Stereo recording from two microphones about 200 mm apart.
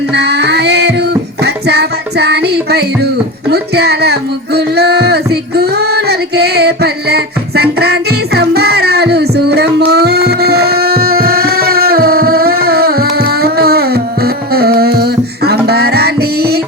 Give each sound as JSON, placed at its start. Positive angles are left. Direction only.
{"t": 0.1, "sound": "music", "side_deg": -55}